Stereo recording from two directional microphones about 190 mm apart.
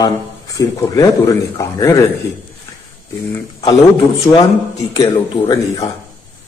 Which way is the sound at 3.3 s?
15° left (ahead or behind).